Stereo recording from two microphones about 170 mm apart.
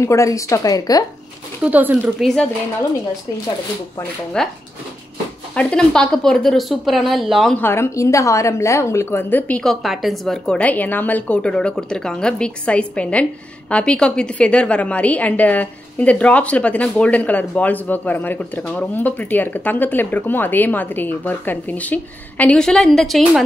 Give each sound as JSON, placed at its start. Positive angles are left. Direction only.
{"t": 0.0, "sound": "a woman's voice", "side_deg": 20}
{"t": 1.6, "sound": "speech", "side_deg": -10}
{"t": 4.4, "sound": "a woman's voice", "side_deg": 5}
{"t": 7.5, "sound": "a woman's voice", "side_deg": 15}